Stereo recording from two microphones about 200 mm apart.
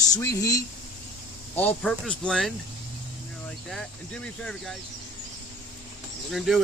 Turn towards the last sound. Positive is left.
turn(degrees=0)  # may be behind; listen again after turning